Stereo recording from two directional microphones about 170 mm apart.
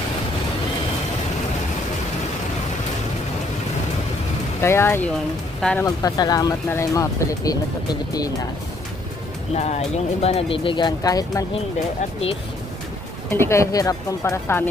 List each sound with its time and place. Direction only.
4.6 s speech: 15° left (ahead or behind)
5.9 s speech: 20° left (ahead or behind)
9.6 s speech: 40° left (ahead or behind); by 11.4 s 20° left (ahead or behind)
13.3 s speech: 15° left (ahead or behind)